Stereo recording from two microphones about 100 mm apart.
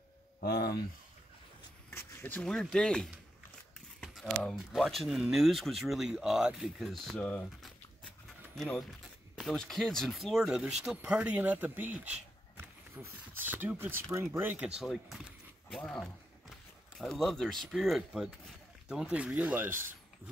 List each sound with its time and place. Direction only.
1.9 s a sound: 25° left (ahead or behind)
2.4 s speech: 5° left (ahead or behind)
4.6 s speech: centre (ahead or behind)
7.2 s speech: 10° left (ahead or behind)
8.5 s speech: 5° left (ahead or behind); by 14.7 s 20° right (ahead or behind)
14.8 s speech: centre (ahead or behind)
15.7 s a sound: 5° left (ahead or behind)
17.0 s speech: centre (ahead or behind); by 19.8 s 15° right (ahead or behind)